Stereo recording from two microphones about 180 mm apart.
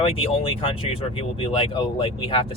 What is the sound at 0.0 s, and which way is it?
Speech, 30° left (ahead or behind).